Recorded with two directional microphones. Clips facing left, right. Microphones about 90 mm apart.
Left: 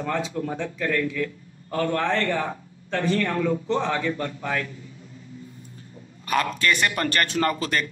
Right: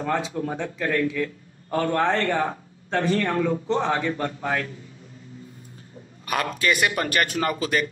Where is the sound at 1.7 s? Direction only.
30° right (ahead or behind).